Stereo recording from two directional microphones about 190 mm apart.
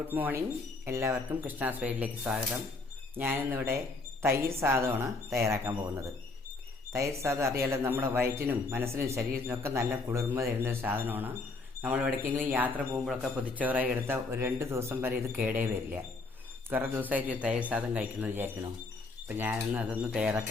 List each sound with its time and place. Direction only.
0.1 s speech: 10° right (ahead or behind)